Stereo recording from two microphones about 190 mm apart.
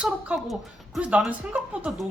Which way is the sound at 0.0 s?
5° right (ahead or behind).